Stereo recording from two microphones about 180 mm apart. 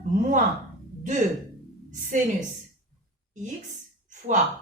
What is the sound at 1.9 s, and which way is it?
Speech, 45° right (ahead or behind).